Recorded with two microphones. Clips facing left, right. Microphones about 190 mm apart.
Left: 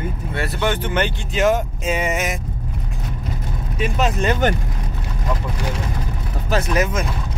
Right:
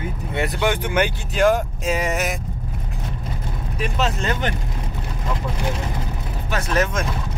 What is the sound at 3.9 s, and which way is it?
Speech, 15° left (ahead or behind).